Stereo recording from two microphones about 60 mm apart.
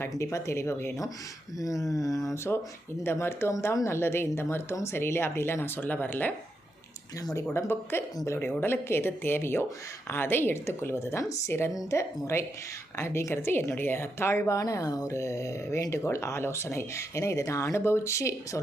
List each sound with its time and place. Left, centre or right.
0.2 s speech: left
1.5 s speech: left
7.5 s speech: left
11.2 s speech: left
11.9 s speech: left
15.1 s speech: left